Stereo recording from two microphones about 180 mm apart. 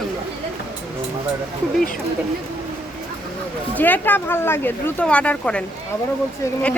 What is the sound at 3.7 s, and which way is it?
Speech, 10° left (ahead or behind).